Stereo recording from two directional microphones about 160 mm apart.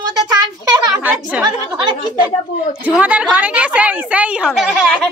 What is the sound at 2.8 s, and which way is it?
A child's voice, 10° right (ahead or behind).